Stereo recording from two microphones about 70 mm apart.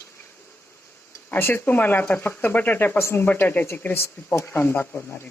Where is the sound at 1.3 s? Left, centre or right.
Left.